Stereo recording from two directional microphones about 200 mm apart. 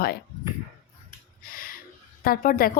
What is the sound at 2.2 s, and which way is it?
Speech, 45° left (ahead or behind).